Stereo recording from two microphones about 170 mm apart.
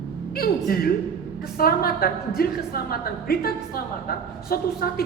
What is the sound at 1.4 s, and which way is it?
A woman's voice, 60° left (ahead or behind).